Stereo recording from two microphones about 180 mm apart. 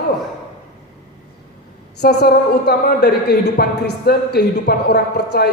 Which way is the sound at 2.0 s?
60° left (ahead or behind).